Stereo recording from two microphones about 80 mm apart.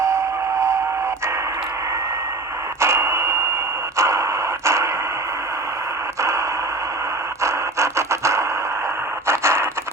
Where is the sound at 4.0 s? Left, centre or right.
Right.